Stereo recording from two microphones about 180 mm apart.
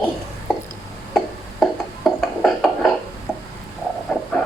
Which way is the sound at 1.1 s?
Centre (ahead or behind).